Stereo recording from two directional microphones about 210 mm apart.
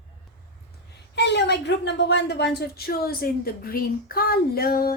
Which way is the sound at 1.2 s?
55° left (ahead or behind).